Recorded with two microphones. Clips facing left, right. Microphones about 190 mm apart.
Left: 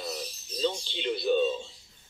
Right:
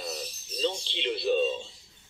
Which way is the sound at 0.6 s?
Centre (ahead or behind).